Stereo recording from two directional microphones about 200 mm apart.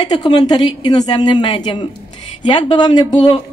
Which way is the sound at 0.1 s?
20° left (ahead or behind).